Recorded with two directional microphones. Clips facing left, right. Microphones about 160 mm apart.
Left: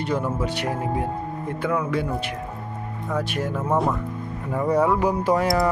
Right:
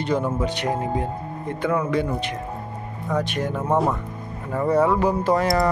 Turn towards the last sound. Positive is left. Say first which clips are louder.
# right 1 dB
turn(degrees=10)  # may be behind; listen again after turning